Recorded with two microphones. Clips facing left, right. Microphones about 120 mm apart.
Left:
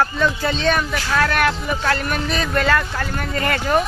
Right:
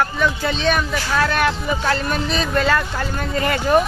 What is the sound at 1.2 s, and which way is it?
Speech, 20° right (ahead or behind).